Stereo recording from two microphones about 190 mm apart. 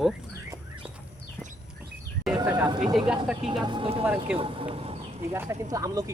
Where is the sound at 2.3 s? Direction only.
15° right (ahead or behind).